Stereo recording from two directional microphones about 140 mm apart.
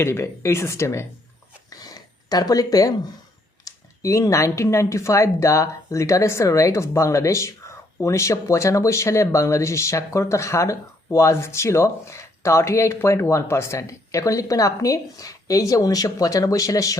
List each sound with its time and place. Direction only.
0.0 s speech: 20° left (ahead or behind)
1.7 s a sound: 30° left (ahead or behind)
3.7 s speech: 20° left (ahead or behind)